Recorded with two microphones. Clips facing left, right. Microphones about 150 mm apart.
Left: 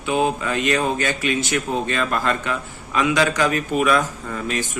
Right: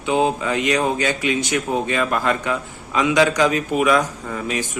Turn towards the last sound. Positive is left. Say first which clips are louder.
# right 1 dB
turn(degrees=-15)  # may be behind; listen again after turning